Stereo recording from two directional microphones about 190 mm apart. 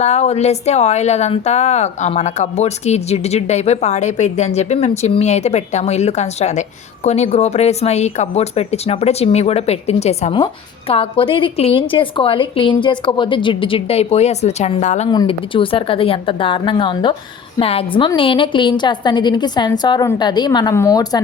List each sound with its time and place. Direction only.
0.0 s speech: 35° left (ahead or behind)
15.1 s a woman's voice: 25° left (ahead or behind)